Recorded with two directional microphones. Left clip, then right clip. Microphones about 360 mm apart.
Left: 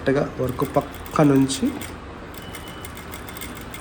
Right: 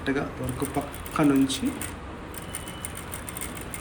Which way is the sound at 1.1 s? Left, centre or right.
Centre.